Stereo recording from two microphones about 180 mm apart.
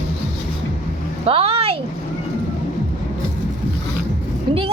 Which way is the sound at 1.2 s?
30° right (ahead or behind).